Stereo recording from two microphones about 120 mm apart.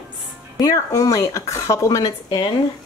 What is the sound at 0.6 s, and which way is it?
Speech, 25° left (ahead or behind).